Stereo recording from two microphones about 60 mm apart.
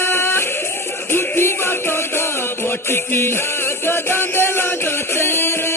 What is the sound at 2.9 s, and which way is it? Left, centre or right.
Chant, left.